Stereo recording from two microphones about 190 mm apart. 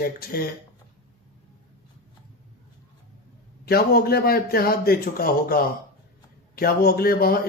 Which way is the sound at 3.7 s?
55° left (ahead or behind).